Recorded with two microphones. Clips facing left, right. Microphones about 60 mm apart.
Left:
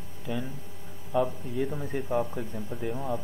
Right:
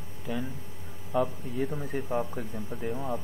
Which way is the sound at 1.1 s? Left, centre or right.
Centre.